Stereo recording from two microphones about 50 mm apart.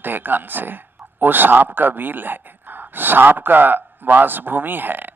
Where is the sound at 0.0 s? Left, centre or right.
Right.